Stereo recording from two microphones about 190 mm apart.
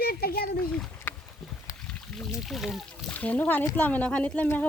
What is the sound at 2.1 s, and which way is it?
Speech, centre (ahead or behind).